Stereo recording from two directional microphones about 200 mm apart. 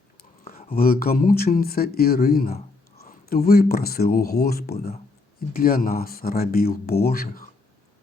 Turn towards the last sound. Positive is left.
turn(degrees=50)  # may be behind; listen again after turning